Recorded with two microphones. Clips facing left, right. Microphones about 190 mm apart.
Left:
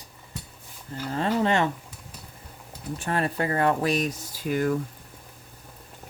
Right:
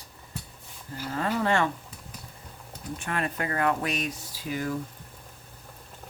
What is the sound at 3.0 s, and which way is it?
Speech, 35° left (ahead or behind).